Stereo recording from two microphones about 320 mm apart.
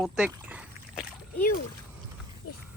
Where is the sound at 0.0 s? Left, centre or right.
Centre.